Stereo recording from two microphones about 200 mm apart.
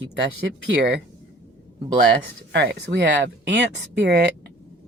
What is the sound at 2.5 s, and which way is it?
Speech, 55° right (ahead or behind).